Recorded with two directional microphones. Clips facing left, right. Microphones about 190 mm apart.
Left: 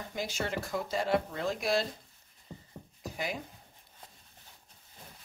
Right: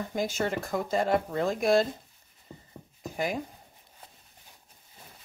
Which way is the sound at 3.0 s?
45° right (ahead or behind).